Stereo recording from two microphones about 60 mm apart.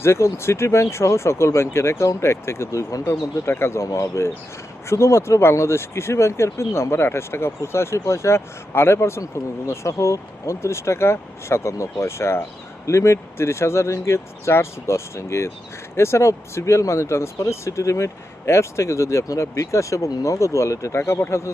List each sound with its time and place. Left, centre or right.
0.0 s speech: left
21.0 s speech: left